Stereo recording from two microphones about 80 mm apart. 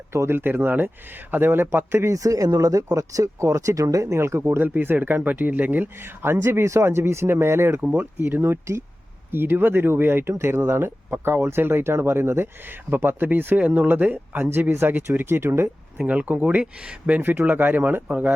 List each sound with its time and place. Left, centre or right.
0.1 s speech: right
2.1 s speech: right
7.8 s speech: right
16.0 s speech: centre